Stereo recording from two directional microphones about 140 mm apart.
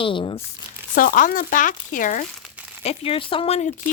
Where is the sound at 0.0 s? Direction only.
35° left (ahead or behind).